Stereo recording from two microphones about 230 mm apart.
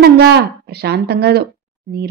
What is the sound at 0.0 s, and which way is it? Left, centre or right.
A woman's voice, right.